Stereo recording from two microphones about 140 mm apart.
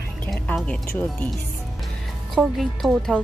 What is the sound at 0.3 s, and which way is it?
Speech, 5° left (ahead or behind).